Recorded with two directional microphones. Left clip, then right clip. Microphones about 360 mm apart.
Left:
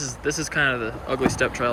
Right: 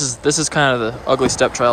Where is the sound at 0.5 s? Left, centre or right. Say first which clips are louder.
Right 3 dB; right.